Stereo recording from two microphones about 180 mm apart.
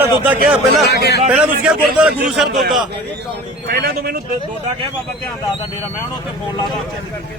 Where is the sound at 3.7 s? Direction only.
60° right (ahead or behind).